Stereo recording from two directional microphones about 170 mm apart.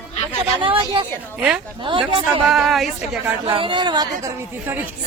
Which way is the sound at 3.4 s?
30° right (ahead or behind).